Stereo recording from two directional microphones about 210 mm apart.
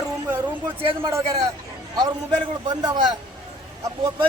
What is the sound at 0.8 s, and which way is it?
Speech, 25° right (ahead or behind).